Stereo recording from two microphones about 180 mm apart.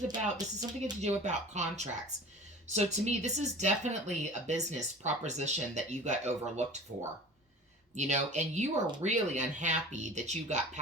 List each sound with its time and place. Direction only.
0.1 s speech: 20° right (ahead or behind)
1.0 s speech: 40° right (ahead or behind)
7.9 s speech: 40° right (ahead or behind)